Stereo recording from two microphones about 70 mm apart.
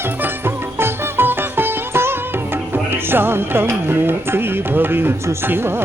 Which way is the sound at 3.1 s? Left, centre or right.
Right.